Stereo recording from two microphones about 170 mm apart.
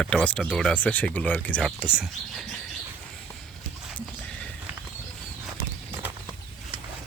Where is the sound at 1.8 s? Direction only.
5° right (ahead or behind).